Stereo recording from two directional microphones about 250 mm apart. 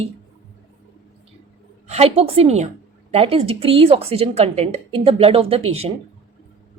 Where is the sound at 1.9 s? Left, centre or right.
Right.